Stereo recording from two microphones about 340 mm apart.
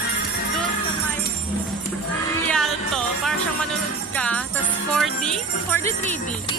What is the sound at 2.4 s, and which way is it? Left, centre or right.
Music, centre.